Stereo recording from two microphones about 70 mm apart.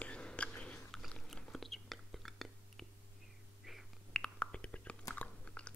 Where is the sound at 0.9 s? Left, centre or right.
Centre.